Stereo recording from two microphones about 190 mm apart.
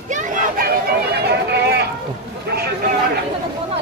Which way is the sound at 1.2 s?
60° right (ahead or behind).